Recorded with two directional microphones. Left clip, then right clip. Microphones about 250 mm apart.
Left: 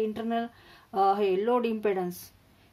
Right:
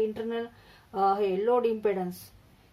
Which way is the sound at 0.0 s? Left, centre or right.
Left.